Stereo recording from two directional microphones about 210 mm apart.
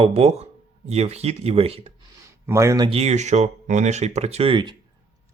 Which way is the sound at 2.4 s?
15° right (ahead or behind).